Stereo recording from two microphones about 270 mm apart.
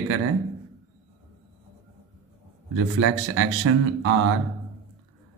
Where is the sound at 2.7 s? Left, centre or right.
Right.